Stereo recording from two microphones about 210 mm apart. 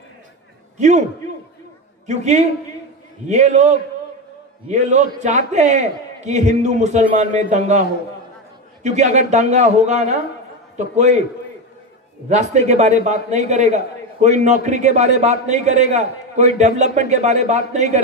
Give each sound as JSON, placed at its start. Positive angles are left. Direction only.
{"t": 0.7, "sound": "a man's voice", "side_deg": -35}
{"t": 2.0, "sound": "a man's voice", "side_deg": -35}
{"t": 8.8, "sound": "a man's voice", "side_deg": -35}
{"t": 12.3, "sound": "a man's voice", "side_deg": -35}